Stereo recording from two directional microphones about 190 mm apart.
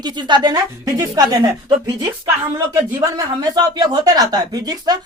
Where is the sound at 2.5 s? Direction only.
20° right (ahead or behind).